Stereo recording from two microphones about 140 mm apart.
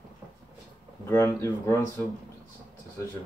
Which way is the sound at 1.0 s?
20° left (ahead or behind).